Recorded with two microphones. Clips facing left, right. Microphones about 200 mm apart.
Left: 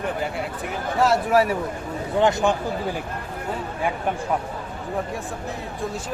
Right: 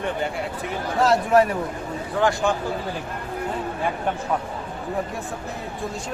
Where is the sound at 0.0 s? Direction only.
5° left (ahead or behind).